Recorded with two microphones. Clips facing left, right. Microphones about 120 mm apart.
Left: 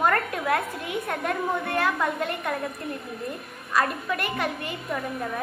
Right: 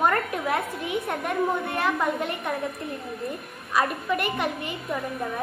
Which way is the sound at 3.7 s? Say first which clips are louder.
Right 1 dB; 15° right (ahead or behind).